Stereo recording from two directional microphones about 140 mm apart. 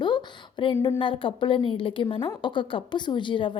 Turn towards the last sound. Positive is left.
turn(degrees=35)  # may be behind; listen again after turning